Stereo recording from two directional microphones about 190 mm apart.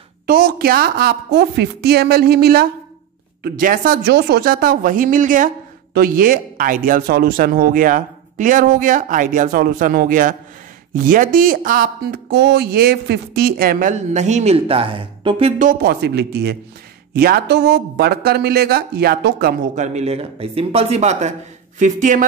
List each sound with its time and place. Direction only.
0.3 s speech: 55° right (ahead or behind); by 15.5 s 25° right (ahead or behind)
15.6 s speech: 55° right (ahead or behind)
19.7 s speech: 40° right (ahead or behind)